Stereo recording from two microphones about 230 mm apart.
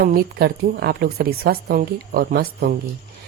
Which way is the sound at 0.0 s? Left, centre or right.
Right.